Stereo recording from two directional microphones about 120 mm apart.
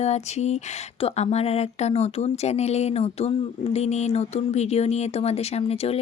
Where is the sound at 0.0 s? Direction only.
65° left (ahead or behind).